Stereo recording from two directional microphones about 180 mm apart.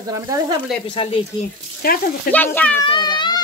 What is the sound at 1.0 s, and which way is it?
Speech, 30° left (ahead or behind).